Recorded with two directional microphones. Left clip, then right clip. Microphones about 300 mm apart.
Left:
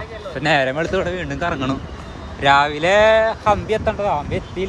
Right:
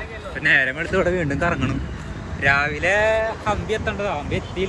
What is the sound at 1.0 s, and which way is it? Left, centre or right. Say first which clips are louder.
Speech: right 2 dB; centre.